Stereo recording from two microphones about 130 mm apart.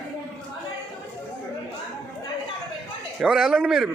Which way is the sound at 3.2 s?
Centre (ahead or behind).